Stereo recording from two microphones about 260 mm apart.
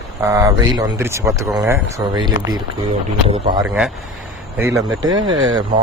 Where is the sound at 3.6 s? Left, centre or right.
Centre.